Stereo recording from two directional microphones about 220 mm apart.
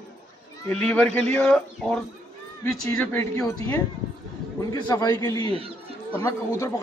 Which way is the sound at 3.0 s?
10° left (ahead or behind).